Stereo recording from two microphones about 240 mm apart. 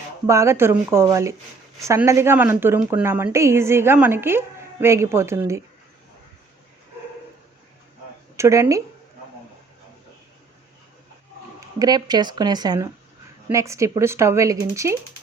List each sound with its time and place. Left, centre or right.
0.3 s a woman's voice: centre
8.4 s a woman's voice: centre
11.8 s a woman's voice: centre